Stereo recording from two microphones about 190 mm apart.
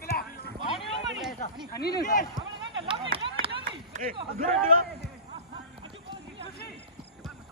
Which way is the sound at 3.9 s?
45° right (ahead or behind).